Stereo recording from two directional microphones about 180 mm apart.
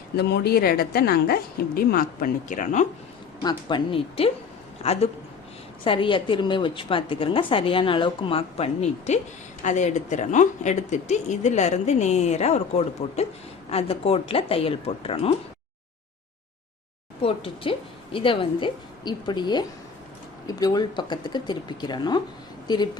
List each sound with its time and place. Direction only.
0.2 s a woman's voice: 65° left (ahead or behind); by 2.8 s 45° left (ahead or behind)
3.4 s a woman's voice: 25° left (ahead or behind)
17.2 s a woman's voice: 30° left (ahead or behind)